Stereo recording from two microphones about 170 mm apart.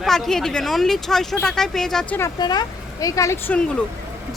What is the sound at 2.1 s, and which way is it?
Speech, 20° left (ahead or behind).